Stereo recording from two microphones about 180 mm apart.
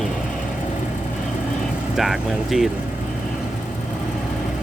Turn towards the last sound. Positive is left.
turn(degrees=0)  # may be behind; listen again after turning